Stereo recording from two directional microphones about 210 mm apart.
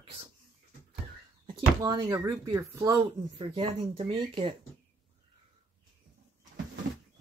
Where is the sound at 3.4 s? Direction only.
25° right (ahead or behind).